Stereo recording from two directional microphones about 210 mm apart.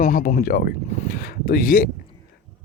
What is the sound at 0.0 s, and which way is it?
Speech, 40° left (ahead or behind).